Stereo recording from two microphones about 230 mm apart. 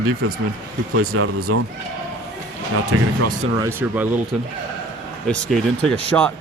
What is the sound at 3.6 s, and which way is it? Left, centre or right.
Speech, centre.